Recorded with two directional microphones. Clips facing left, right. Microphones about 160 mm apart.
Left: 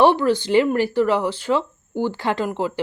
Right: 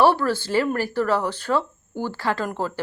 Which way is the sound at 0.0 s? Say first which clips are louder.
Left 3 dB; 20° left (ahead or behind).